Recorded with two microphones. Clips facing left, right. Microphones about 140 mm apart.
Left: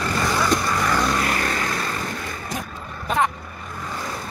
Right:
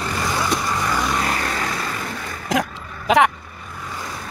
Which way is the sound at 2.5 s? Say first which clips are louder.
Right 11 dB; 90° right.